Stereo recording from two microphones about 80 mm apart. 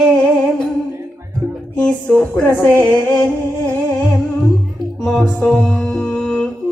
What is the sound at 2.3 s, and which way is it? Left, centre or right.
Music, left.